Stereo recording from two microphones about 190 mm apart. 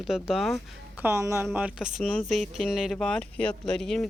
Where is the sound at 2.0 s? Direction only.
5° left (ahead or behind).